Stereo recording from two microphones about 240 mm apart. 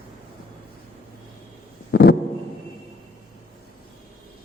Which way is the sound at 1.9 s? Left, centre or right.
Left.